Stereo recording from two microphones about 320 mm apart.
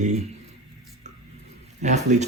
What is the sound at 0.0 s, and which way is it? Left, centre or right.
Speech, right.